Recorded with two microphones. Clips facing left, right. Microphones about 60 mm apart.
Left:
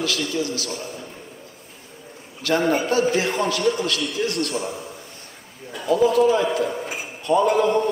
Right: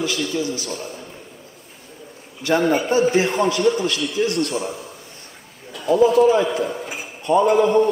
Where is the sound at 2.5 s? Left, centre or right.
Centre.